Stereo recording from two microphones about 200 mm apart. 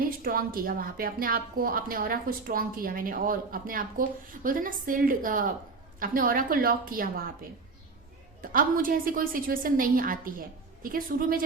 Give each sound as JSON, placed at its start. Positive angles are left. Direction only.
{"t": 0.0, "sound": "a woman's voice", "side_deg": -45}
{"t": 8.4, "sound": "a woman's voice", "side_deg": -45}